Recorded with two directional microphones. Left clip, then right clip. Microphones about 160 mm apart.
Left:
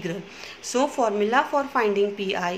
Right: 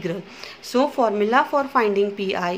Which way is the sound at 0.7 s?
30° right (ahead or behind).